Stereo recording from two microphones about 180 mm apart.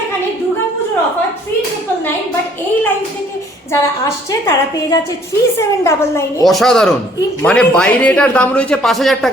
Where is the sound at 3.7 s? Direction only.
15° left (ahead or behind).